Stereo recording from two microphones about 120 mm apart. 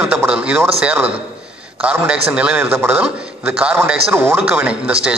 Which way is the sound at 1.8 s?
10° right (ahead or behind).